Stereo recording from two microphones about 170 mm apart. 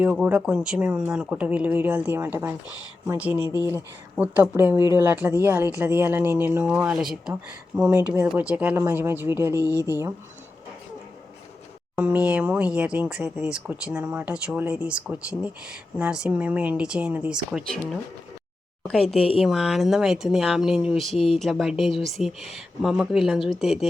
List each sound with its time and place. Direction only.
0.0 s speech: 5° right (ahead or behind)
11.9 s speech: 5° right (ahead or behind)
18.8 s speech: centre (ahead or behind)